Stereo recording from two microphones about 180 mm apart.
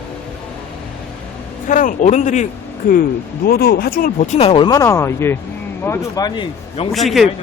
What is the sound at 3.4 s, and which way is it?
Speech, 60° left (ahead or behind).